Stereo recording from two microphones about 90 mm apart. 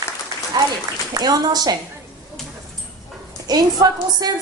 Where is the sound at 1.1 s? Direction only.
45° right (ahead or behind).